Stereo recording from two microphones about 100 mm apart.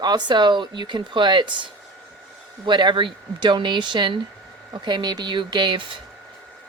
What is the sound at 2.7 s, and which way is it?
Speech, 50° right (ahead or behind).